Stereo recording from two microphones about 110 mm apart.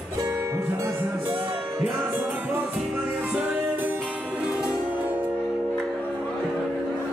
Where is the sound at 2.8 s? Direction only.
5° right (ahead or behind).